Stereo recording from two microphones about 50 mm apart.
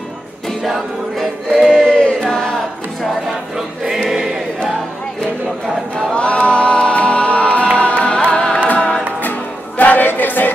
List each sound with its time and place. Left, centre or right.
0.7 s choir: centre
1.9 s choir: centre
3.5 s choir: centre
6.1 s music: left
9.2 s music: left